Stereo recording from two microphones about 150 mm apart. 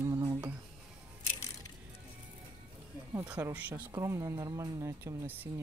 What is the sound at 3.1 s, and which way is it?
Speech, 15° right (ahead or behind).